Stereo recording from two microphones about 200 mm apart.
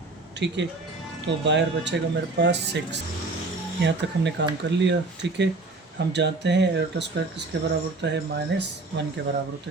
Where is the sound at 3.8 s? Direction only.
60° right (ahead or behind).